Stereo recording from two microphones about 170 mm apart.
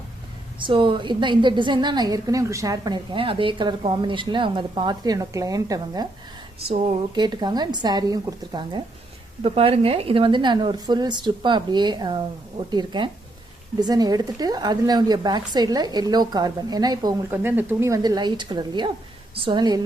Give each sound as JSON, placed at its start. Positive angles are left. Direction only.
{"t": 0.6, "sound": "a woman's voice", "side_deg": -30}
{"t": 6.6, "sound": "speech", "side_deg": -40}
{"t": 7.2, "sound": "a woman's voice", "side_deg": -25}
{"t": 17.3, "sound": "a woman's voice", "side_deg": -10}